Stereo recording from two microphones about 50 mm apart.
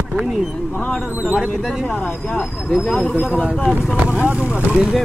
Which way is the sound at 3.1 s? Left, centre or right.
Left.